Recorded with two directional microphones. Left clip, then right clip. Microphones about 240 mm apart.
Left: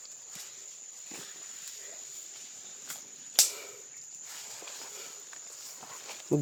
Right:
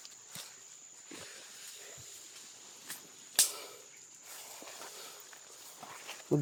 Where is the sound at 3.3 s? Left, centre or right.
Centre.